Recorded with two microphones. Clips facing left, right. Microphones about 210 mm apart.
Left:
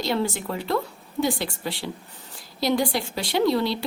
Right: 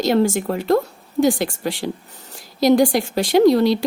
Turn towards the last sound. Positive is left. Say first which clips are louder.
# right 8 dB
turn(degrees=-45)  # may be behind; listen again after turning